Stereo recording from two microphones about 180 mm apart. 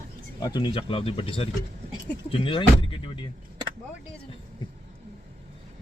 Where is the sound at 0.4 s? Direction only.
25° left (ahead or behind).